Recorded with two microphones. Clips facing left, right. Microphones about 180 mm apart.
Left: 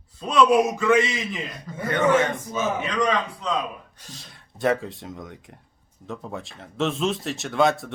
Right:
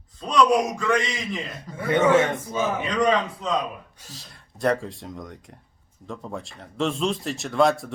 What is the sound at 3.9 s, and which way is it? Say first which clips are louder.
Speech: even; 5° right (ahead or behind).